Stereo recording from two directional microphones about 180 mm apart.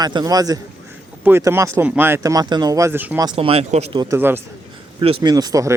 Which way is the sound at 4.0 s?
15° right (ahead or behind).